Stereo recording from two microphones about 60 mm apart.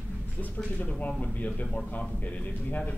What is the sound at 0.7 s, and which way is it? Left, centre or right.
A man's voice, left.